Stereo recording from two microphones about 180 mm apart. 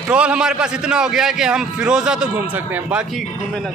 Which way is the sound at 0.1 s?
5° right (ahead or behind).